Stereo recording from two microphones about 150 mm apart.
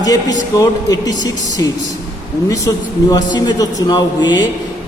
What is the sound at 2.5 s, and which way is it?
A man's voice, 25° left (ahead or behind).